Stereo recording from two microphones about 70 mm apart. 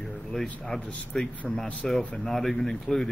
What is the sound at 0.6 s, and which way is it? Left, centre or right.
Speech, centre.